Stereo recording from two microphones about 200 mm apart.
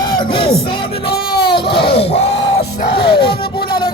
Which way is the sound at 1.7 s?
55° left (ahead or behind).